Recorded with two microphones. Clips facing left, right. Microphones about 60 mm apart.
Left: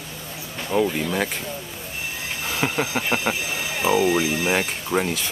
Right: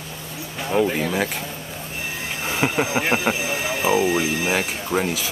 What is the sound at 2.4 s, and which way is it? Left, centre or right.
Speech, centre.